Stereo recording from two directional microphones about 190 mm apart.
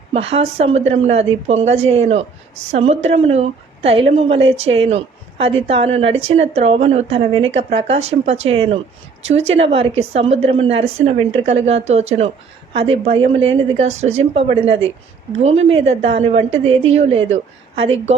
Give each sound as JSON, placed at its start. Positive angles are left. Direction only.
{"t": 0.1, "sound": "a woman's voice", "side_deg": -30}